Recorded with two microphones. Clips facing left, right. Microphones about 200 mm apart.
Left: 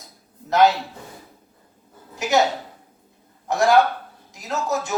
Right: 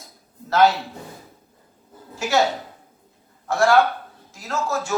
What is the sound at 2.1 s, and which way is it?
Speech, 20° left (ahead or behind).